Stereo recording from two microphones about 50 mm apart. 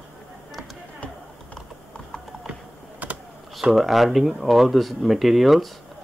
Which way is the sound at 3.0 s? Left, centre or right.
Right.